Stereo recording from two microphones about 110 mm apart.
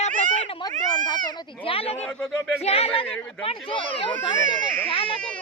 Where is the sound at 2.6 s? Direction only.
65° left (ahead or behind).